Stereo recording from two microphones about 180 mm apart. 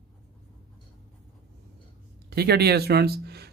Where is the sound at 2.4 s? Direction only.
60° right (ahead or behind).